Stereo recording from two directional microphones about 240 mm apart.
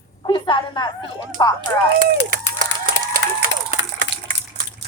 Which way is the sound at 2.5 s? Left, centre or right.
Right.